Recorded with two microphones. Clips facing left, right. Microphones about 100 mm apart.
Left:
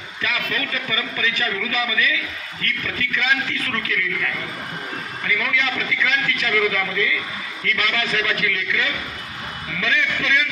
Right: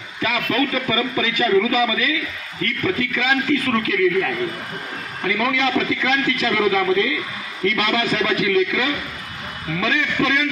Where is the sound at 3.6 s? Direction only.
40° right (ahead or behind).